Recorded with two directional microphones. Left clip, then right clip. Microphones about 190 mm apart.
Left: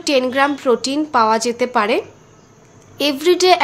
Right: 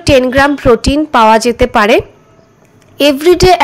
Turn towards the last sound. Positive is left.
turn(degrees=-30)  # may be behind; listen again after turning